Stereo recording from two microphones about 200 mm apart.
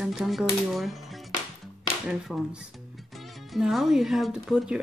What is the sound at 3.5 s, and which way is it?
Speech, centre (ahead or behind).